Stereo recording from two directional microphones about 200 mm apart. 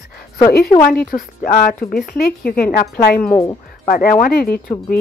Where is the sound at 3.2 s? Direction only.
10° left (ahead or behind).